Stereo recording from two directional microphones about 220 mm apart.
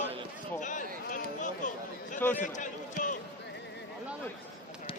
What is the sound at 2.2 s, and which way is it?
Speech, 10° left (ahead or behind).